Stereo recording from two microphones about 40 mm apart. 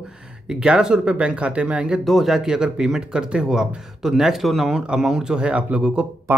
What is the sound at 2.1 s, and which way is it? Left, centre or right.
Speech, centre.